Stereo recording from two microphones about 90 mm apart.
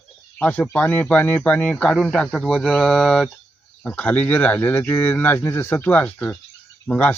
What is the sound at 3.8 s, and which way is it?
Speech, 15° left (ahead or behind).